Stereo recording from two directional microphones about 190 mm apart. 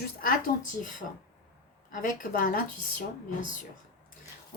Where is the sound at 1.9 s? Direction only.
45° left (ahead or behind).